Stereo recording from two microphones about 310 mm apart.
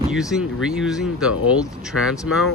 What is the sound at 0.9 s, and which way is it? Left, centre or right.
Speech, centre.